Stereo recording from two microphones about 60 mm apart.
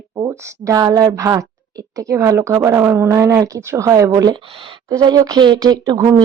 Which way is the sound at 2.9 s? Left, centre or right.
Right.